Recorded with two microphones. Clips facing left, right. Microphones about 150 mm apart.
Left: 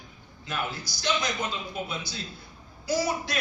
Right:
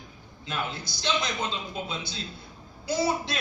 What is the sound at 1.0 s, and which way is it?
A man's voice, 25° right (ahead or behind).